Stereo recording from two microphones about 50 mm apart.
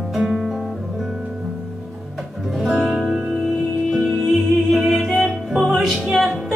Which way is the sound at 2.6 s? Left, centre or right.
Centre.